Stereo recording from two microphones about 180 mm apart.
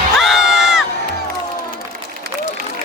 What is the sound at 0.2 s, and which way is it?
Crowd, centre (ahead or behind).